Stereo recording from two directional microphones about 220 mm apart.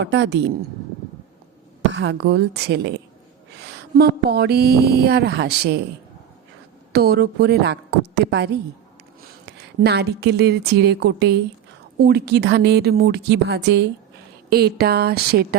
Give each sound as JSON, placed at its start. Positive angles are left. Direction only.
{"t": 0.0, "sound": "speech", "side_deg": -55}
{"t": 1.9, "sound": "speech", "side_deg": -55}
{"t": 6.9, "sound": "speech", "side_deg": -45}
{"t": 9.5, "sound": "speech", "side_deg": -50}